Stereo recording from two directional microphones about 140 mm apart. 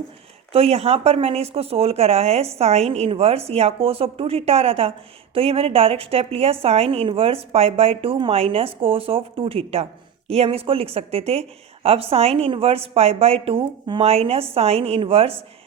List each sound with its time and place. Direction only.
0.5 s speech: 45° right (ahead or behind)